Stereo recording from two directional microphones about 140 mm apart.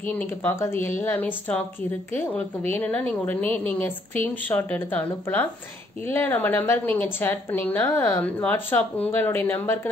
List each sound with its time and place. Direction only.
0.1 s a woman's voice: 10° left (ahead or behind)